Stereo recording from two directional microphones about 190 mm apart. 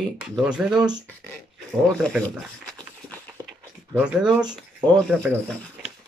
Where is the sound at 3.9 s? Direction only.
5° right (ahead or behind).